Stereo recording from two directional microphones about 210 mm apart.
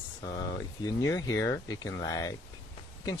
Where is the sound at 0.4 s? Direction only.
15° left (ahead or behind).